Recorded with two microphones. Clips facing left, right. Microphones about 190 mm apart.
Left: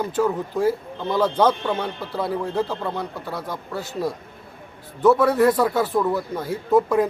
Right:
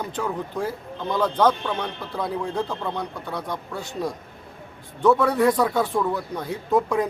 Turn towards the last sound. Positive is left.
turn(degrees=5)  # may be behind; listen again after turning